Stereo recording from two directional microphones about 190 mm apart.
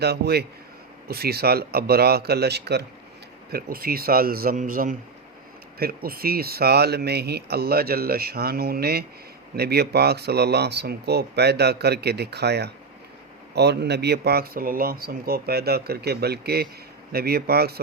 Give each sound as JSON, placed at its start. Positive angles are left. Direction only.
{"t": 0.0, "sound": "speech", "side_deg": -60}